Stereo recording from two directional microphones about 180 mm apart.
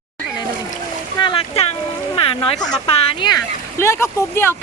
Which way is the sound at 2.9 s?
30° left (ahead or behind).